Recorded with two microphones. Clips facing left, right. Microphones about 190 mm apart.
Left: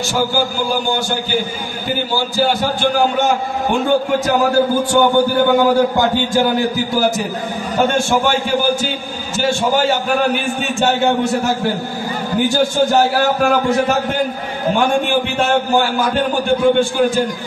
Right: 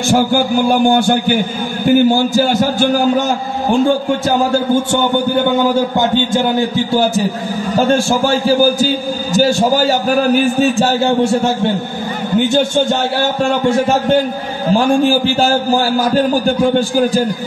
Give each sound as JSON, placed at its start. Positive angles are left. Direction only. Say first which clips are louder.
{"t": 0.1, "sound": "a man's voice", "louder": "right 7 dB", "side_deg": -55}
{"t": 5.9, "sound": "a man's voice", "louder": "right 1 dB", "side_deg": -25}